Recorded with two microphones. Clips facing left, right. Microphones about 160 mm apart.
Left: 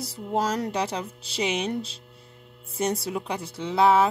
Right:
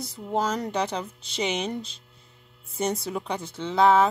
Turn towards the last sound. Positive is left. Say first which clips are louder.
# even
turn(degrees=5)  # may be behind; listen again after turning